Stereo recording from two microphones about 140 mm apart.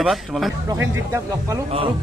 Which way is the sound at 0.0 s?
Centre (ahead or behind).